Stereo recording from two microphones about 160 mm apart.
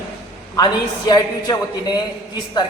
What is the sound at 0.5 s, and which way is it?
A man's voice, 25° left (ahead or behind).